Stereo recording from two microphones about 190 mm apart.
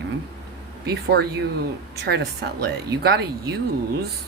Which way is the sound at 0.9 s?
55° right (ahead or behind).